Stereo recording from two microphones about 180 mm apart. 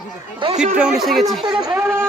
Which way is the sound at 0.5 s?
40° right (ahead or behind).